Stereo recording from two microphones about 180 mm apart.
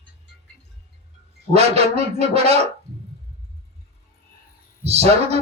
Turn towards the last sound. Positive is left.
turn(degrees=-35)  # may be behind; listen again after turning